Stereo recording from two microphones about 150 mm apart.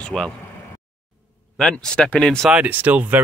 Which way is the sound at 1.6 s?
5° left (ahead or behind).